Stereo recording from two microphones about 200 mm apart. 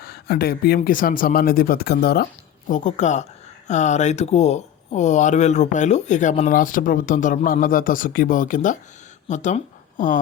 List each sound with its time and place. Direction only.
0.0 s speech: 50° left (ahead or behind)
2.6 s speech: 40° left (ahead or behind)